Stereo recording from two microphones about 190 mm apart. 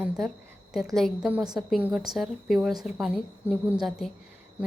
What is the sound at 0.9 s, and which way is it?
A woman's voice, centre (ahead or behind).